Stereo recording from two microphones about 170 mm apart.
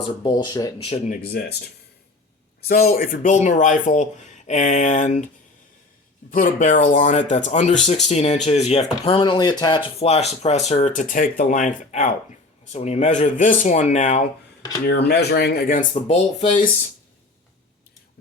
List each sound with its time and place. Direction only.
0.2 s speech: 25° left (ahead or behind)
0.8 s speech: 35° left (ahead or behind)
1.1 s speech: 65° left (ahead or behind)
2.6 s speech: 60° left (ahead or behind)
6.3 s speech: 50° left (ahead or behind)
14.8 s speech: 70° left (ahead or behind)
16.0 s speech: 40° left (ahead or behind)